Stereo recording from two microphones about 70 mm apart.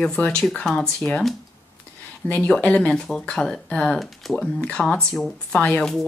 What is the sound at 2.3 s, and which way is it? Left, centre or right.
A woman's voice, centre.